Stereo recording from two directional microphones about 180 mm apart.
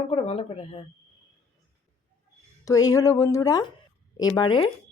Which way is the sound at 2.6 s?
20° left (ahead or behind).